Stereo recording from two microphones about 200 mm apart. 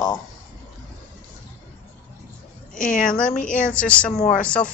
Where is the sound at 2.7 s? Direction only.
40° left (ahead or behind).